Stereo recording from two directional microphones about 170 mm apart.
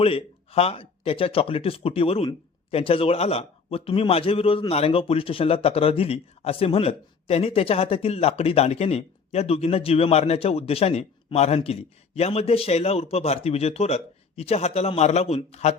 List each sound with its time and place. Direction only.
0.0 s speech: 35° left (ahead or behind)